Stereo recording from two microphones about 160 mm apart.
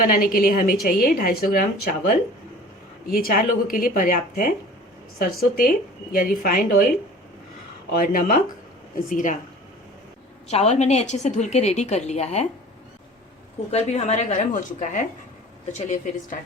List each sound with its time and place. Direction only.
0.0 s a woman's voice: 60° left (ahead or behind)
7.9 s a woman's voice: 60° left (ahead or behind)
10.5 s a woman's voice: 45° left (ahead or behind)
13.7 s a woman's voice: 45° left (ahead or behind)